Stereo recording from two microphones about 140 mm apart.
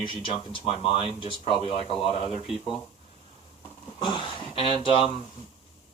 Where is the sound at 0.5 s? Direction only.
40° left (ahead or behind).